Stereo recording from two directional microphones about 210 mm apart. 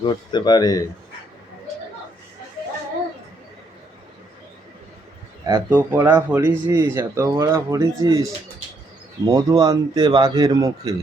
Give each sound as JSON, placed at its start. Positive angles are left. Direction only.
{"t": 0.0, "sound": "speech", "side_deg": 20}
{"t": 5.5, "sound": "speech", "side_deg": -10}
{"t": 9.2, "sound": "speech", "side_deg": -20}